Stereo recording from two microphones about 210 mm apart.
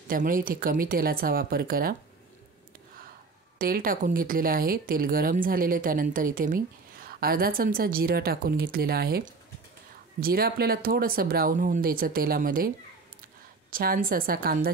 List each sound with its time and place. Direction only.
0.1 s speech: 40° right (ahead or behind)
3.5 s speech: 45° right (ahead or behind)